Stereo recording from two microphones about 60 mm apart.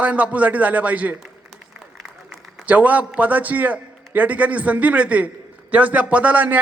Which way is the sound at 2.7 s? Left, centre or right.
Right.